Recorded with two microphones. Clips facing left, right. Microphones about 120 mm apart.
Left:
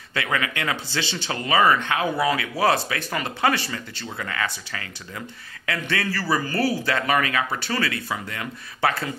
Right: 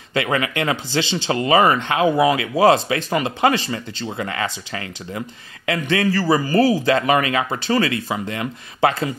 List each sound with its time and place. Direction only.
0.3 s speech: 30° right (ahead or behind)